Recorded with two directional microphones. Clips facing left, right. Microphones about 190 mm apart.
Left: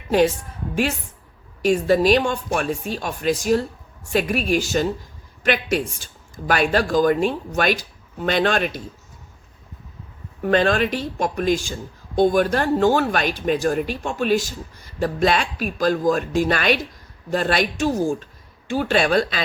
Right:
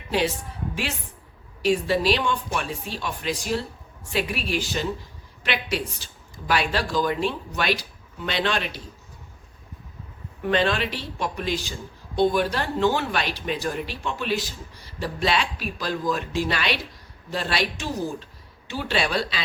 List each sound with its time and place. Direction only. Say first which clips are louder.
1.6 s speech: left 5 dB; 45° left (ahead or behind)
10.4 s speech: left 5 dB; 45° left (ahead or behind)